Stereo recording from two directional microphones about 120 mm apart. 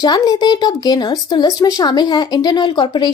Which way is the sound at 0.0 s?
30° left (ahead or behind).